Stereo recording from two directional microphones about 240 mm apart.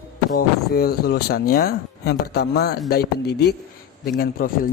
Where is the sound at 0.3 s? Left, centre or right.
Left.